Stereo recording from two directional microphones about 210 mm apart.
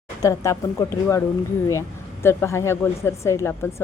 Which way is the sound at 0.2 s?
15° left (ahead or behind).